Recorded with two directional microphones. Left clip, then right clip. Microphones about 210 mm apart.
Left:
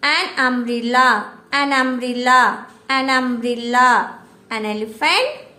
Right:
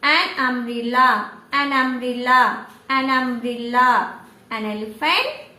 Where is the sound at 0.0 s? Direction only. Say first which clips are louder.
Left 1 dB; 60° left (ahead or behind).